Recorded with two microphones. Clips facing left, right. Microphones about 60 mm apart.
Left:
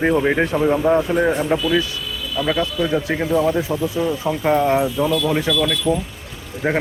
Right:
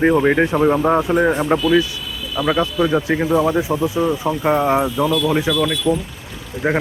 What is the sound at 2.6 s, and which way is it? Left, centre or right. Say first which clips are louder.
Speech: right 3 dB; right.